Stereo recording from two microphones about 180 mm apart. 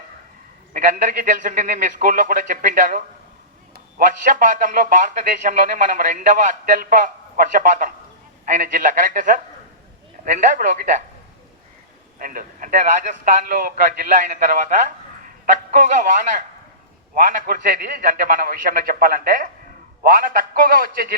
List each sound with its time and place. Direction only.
0.7 s a man's voice: 45° right (ahead or behind)
12.2 s a man's voice: 50° right (ahead or behind)